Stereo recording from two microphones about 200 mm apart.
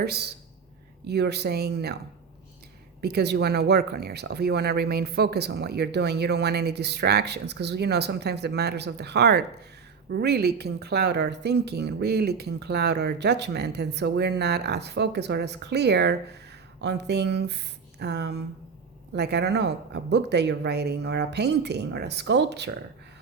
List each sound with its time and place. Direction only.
0.0 s speech: 55° right (ahead or behind)
3.0 s speech: 55° right (ahead or behind)